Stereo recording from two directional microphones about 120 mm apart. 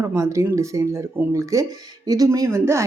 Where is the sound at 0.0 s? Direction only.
25° right (ahead or behind).